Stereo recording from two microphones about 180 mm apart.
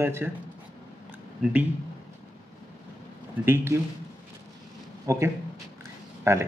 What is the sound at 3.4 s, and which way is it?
Speech, 15° right (ahead or behind).